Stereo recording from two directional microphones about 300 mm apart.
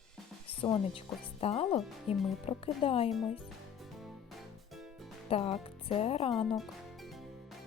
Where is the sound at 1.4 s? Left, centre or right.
Centre.